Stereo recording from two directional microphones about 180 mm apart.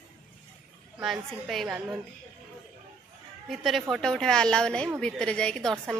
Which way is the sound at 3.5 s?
Centre (ahead or behind).